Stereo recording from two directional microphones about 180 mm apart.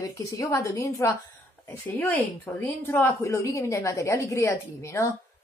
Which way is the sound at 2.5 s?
10° left (ahead or behind).